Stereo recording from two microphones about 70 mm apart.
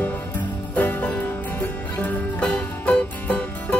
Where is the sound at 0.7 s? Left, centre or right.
Left.